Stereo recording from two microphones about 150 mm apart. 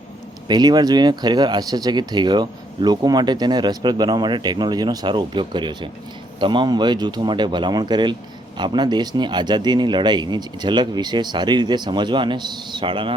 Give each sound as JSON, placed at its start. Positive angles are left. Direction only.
{"t": 0.4, "sound": "speech", "side_deg": -30}